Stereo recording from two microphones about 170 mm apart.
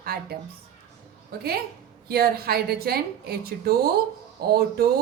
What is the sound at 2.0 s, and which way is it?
A woman's voice, 65° right (ahead or behind).